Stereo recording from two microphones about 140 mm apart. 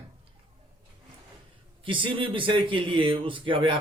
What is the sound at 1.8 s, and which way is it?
Speech, 35° right (ahead or behind).